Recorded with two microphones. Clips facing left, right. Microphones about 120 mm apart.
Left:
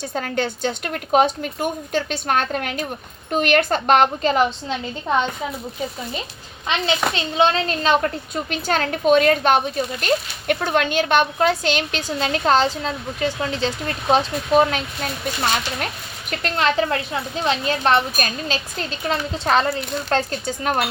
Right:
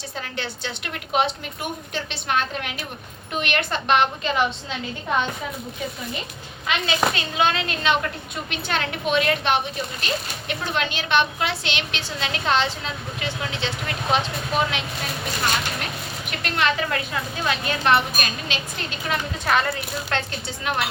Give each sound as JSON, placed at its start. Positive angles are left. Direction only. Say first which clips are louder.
{"t": 0.1, "sound": "a woman's voice", "louder": "left 9 dB", "side_deg": 45}
{"t": 6.7, "sound": "a child's voice", "louder": "left 1 dB", "side_deg": 25}
{"t": 16.4, "sound": "a child's voice", "louder": "left 4 dB", "side_deg": 35}
{"t": 20.7, "sound": "a woman's voice", "louder": "left 4 dB", "side_deg": 45}